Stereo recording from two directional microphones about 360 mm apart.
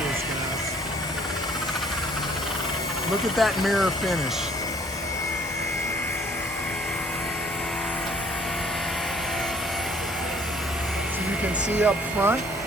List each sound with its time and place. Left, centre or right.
3.3 s speech: centre
11.8 s speech: centre